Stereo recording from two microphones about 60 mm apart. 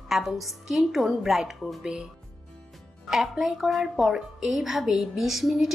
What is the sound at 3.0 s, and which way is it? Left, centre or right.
A woman's voice, centre.